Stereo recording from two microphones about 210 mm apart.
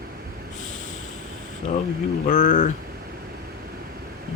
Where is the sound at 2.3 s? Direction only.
40° left (ahead or behind).